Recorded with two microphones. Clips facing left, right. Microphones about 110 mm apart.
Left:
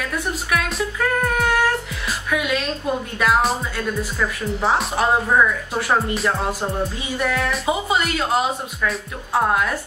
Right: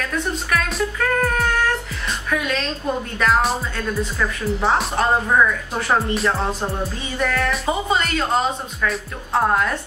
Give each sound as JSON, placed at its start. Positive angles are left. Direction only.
{"t": 0.0, "sound": "speech", "side_deg": 5}
{"t": 2.3, "sound": "a sound", "side_deg": 10}
{"t": 3.2, "sound": "speech", "side_deg": 5}